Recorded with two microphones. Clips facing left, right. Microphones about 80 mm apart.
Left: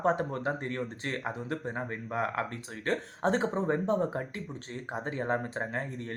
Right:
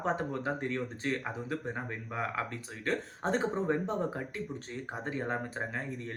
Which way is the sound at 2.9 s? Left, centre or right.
Left.